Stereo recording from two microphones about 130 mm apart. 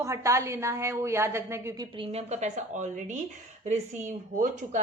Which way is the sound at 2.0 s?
55° right (ahead or behind).